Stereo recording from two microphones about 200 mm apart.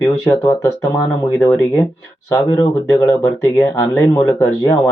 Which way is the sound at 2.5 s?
15° left (ahead or behind).